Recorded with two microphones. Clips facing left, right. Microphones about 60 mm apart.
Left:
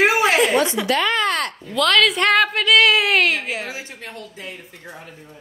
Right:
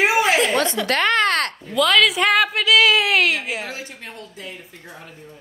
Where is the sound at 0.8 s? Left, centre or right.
Right.